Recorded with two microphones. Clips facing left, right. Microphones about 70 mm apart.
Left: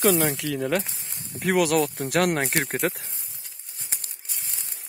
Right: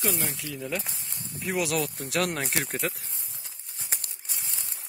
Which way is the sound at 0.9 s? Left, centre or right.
Centre.